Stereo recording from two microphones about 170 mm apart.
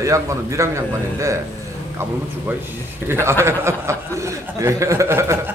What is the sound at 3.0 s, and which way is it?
A man's voice, 15° right (ahead or behind).